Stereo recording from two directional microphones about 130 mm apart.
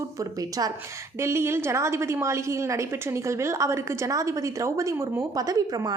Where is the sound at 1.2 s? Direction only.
20° right (ahead or behind).